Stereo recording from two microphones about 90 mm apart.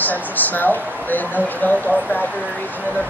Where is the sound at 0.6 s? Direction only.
20° left (ahead or behind).